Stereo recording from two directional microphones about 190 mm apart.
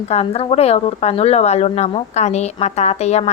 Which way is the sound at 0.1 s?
35° left (ahead or behind).